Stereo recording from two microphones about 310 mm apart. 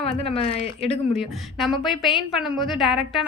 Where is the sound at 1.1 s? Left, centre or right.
Centre.